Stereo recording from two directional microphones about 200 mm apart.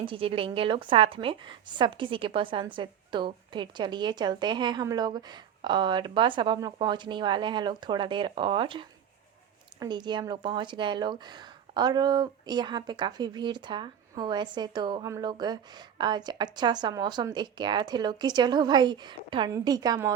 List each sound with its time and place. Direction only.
0.0 s speech: 25° right (ahead or behind)